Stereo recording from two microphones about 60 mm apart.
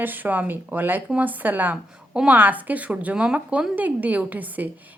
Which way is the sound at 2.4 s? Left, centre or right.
Right.